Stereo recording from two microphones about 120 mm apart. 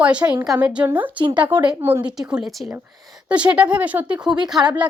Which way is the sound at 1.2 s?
45° right (ahead or behind).